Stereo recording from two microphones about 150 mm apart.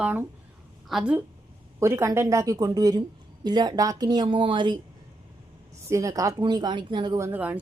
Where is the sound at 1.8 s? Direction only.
15° right (ahead or behind).